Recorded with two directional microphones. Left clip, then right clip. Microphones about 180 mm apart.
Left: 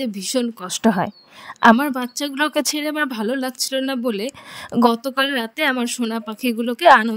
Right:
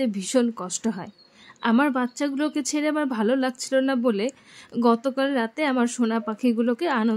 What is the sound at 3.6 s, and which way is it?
Speech, 50° left (ahead or behind).